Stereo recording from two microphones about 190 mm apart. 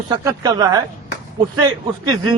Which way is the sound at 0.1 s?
20° right (ahead or behind).